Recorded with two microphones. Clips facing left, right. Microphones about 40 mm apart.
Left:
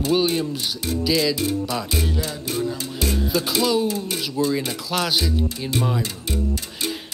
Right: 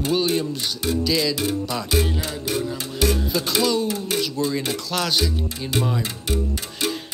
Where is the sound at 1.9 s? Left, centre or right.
Centre.